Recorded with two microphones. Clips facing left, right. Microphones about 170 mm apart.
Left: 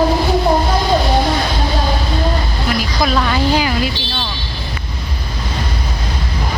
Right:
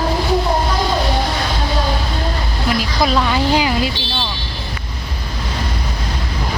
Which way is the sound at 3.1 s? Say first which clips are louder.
Left 1 dB; 20° right (ahead or behind).